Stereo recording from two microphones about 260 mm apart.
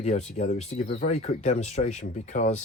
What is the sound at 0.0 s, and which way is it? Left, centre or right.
Speech, left.